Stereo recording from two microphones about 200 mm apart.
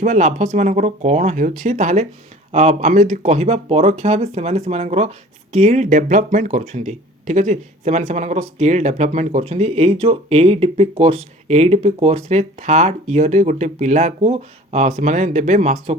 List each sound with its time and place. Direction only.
0.0 s speech: 35° right (ahead or behind)